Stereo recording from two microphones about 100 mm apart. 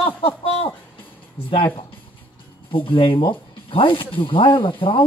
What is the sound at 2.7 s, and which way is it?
Speech, 60° left (ahead or behind).